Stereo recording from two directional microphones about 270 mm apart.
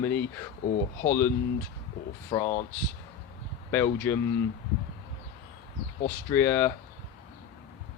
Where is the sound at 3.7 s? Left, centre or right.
Centre.